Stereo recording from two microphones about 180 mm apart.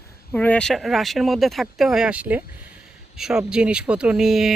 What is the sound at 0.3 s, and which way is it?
Speech, 5° left (ahead or behind).